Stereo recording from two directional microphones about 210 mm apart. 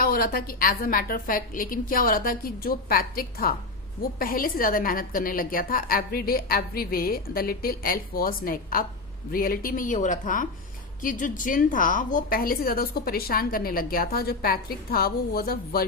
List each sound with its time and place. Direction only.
0.0 s a woman's voice: 45° left (ahead or behind)